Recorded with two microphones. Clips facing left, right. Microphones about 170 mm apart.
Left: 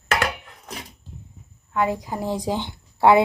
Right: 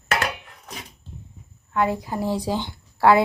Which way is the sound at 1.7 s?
15° left (ahead or behind).